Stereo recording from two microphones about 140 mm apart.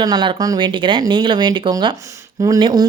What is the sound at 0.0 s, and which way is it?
Speech, 30° right (ahead or behind).